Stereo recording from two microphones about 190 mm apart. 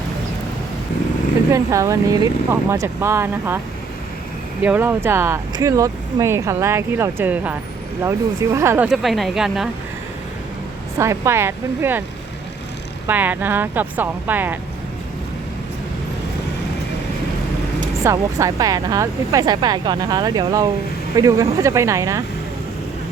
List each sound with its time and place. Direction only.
1.5 s speech: 15° right (ahead or behind)
4.6 s speech: 10° right (ahead or behind)
8.9 s speech: centre (ahead or behind)
10.9 s speech: 15° right (ahead or behind)
13.1 s speech: 10° right (ahead or behind)
17.7 s speech: 15° right (ahead or behind)